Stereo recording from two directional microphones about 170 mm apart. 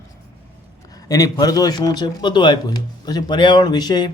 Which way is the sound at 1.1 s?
20° left (ahead or behind).